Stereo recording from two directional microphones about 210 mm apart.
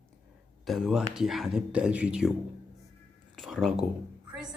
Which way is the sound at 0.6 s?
Centre (ahead or behind).